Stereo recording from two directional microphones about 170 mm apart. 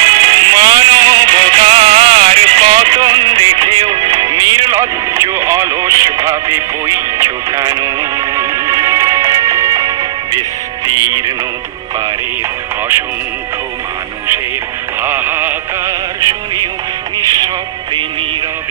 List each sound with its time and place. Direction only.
0.0 s music: 30° right (ahead or behind)
15.0 s music: 10° right (ahead or behind)